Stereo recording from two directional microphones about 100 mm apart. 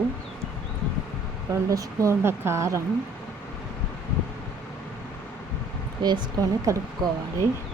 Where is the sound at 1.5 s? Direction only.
30° right (ahead or behind).